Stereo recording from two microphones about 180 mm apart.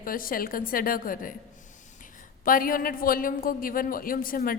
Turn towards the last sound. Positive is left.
turn(degrees=55)  # may be behind; listen again after turning